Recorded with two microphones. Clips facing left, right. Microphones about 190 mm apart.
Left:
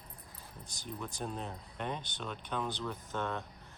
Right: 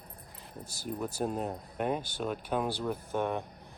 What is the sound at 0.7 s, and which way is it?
Speech, 5° right (ahead or behind).